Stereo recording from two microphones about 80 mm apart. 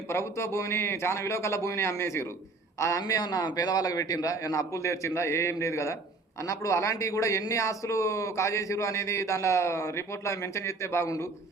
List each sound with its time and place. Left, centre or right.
0.1 s a man's voice: left
3.0 s a man's voice: left